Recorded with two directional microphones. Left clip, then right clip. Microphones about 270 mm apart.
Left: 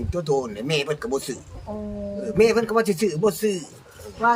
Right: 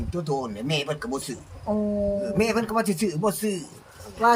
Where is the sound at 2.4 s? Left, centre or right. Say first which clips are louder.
Left 9 dB; centre.